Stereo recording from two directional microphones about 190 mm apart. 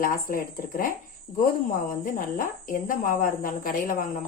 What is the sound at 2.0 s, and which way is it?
Speech, 45° left (ahead or behind).